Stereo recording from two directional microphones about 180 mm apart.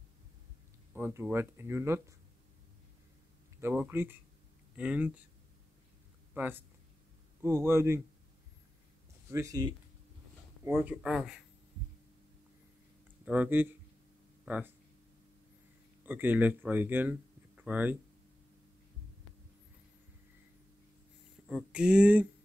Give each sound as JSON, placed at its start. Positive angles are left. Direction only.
{"t": 0.9, "sound": "speech", "side_deg": -10}
{"t": 3.6, "sound": "speech", "side_deg": -10}
{"t": 6.3, "sound": "speech", "side_deg": -10}
{"t": 9.3, "sound": "speech", "side_deg": -20}
{"t": 13.2, "sound": "speech", "side_deg": -10}
{"t": 14.4, "sound": "a sound", "side_deg": -10}
{"t": 16.1, "sound": "speech", "side_deg": -10}
{"t": 21.5, "sound": "speech", "side_deg": -5}